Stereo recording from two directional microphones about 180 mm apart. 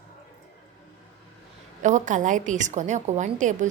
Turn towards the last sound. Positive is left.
turn(degrees=-45)  # may be behind; listen again after turning